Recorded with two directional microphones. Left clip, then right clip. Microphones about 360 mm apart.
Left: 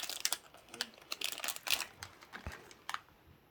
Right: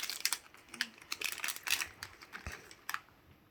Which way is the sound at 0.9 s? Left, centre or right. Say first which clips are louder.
Right 1 dB; left.